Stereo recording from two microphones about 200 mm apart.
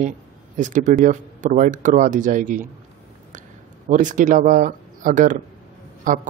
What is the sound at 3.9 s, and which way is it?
Speech, 40° right (ahead or behind).